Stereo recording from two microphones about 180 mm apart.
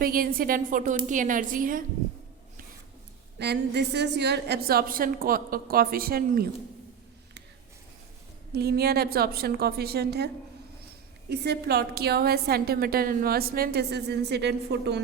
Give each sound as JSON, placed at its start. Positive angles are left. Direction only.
{"t": 0.0, "sound": "a woman's voice", "side_deg": -55}
{"t": 3.3, "sound": "a woman's voice", "side_deg": -70}
{"t": 8.5, "sound": "a woman's voice", "side_deg": -60}
{"t": 11.3, "sound": "a woman's voice", "side_deg": -65}